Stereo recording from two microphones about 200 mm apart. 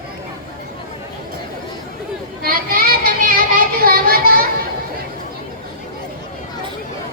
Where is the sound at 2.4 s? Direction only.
45° right (ahead or behind).